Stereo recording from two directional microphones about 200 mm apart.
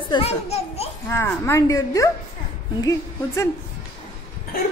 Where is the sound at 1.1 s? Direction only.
10° left (ahead or behind).